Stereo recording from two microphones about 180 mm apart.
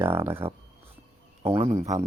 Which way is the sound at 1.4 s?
35° right (ahead or behind).